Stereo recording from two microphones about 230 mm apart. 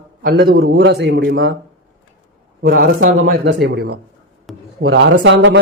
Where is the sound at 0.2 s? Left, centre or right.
Right.